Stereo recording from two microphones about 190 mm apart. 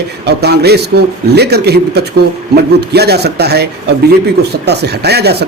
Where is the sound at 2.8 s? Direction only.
60° right (ahead or behind).